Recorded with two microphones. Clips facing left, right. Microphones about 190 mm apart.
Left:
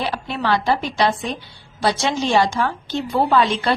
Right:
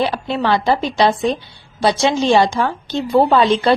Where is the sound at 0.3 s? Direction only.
25° right (ahead or behind).